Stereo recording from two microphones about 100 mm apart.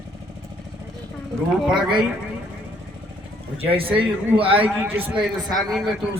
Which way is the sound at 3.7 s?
65° right (ahead or behind).